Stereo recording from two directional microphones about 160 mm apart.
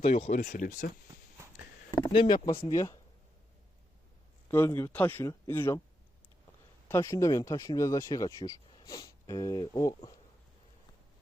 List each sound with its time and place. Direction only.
0.3 s speech: 50° left (ahead or behind)
1.9 s a sound: 30° left (ahead or behind)
2.6 s speech: 25° left (ahead or behind)
4.4 s speech: 15° left (ahead or behind)
6.8 s speech: 15° left (ahead or behind)